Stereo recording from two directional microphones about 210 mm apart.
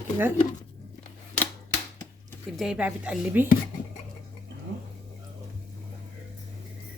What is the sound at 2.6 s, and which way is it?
Speech, 5° right (ahead or behind).